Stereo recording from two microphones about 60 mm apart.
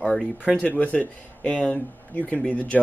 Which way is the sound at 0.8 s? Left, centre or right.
Left.